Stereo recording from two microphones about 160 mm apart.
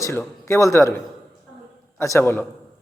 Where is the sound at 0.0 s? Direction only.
15° left (ahead or behind).